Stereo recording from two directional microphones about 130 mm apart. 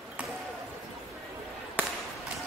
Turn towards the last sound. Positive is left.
turn(degrees=15)  # may be behind; listen again after turning